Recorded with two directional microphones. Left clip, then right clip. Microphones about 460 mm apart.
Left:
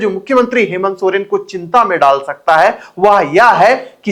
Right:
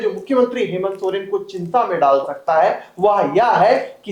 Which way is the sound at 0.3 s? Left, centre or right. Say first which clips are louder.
Left 6 dB; left.